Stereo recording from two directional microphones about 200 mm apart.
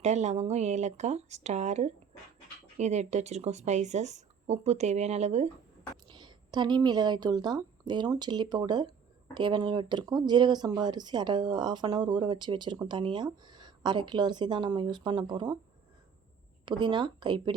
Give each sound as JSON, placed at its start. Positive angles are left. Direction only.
{"t": 0.0, "sound": "speech", "side_deg": -35}
{"t": 6.1, "sound": "a woman's voice", "side_deg": -20}
{"t": 16.6, "sound": "a woman's voice", "side_deg": -25}